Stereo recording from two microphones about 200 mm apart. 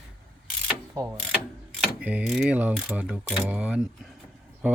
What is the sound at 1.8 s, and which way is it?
Mechanisms, 5° right (ahead or behind).